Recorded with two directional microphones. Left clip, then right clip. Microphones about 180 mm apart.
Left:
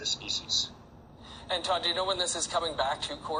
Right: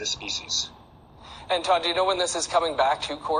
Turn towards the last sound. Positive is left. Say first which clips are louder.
# right 7 dB
turn(degrees=-30)  # may be behind; listen again after turning